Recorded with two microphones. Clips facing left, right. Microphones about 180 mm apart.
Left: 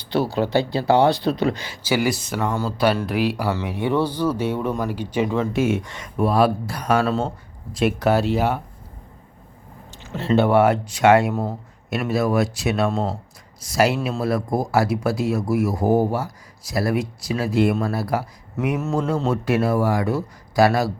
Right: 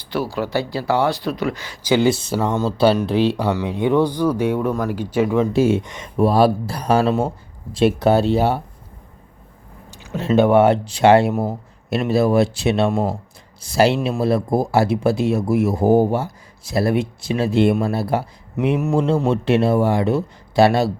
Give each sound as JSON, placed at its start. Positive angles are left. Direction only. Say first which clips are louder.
{"t": 0.3, "sound": "speech", "louder": "left 2 dB", "side_deg": 25}
{"t": 1.8, "sound": "speech", "louder": "right 5 dB", "side_deg": -20}
{"t": 5.5, "sound": "speech", "louder": "right 4 dB", "side_deg": -30}
{"t": 5.8, "sound": "speech", "louder": "right 2 dB", "side_deg": -20}
{"t": 6.1, "sound": "speech", "louder": "right 3 dB", "side_deg": -35}
{"t": 7.1, "sound": "speech", "louder": "right 3 dB", "side_deg": -10}
{"t": 7.7, "sound": "speech", "louder": "right 4 dB", "side_deg": -30}
{"t": 9.9, "sound": "speech", "louder": "right 2 dB", "side_deg": -15}
{"t": 10.6, "sound": "speech", "louder": "right 3 dB", "side_deg": -30}
{"t": 18.8, "sound": "speech", "louder": "right 4 dB", "side_deg": -15}
{"t": 19.3, "sound": "speech", "louder": "right 2 dB", "side_deg": -25}